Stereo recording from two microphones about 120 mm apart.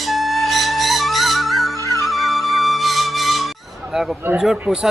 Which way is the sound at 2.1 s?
Centre (ahead or behind).